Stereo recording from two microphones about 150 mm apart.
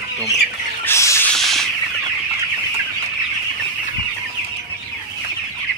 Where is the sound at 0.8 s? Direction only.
20° left (ahead or behind).